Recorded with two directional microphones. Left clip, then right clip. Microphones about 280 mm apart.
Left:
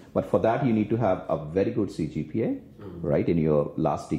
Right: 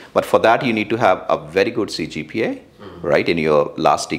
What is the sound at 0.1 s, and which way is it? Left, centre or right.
Speech, centre.